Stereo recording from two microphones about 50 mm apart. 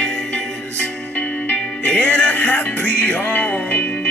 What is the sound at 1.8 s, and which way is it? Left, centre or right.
Music, left.